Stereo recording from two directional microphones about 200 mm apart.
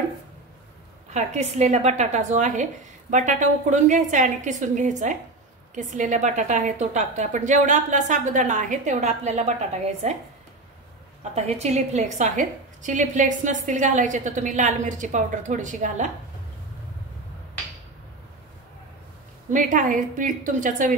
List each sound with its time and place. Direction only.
1.1 s a woman's voice: 35° right (ahead or behind)
11.3 s a woman's voice: 35° right (ahead or behind)
19.5 s a woman's voice: 40° right (ahead or behind)